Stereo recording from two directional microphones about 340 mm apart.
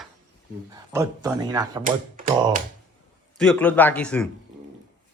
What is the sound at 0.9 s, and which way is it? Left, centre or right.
Speech, centre.